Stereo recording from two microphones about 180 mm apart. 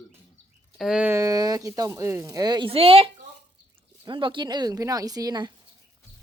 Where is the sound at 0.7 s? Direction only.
5° right (ahead or behind); by 5.5 s 20° right (ahead or behind).